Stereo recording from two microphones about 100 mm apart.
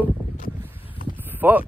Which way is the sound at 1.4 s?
20° right (ahead or behind).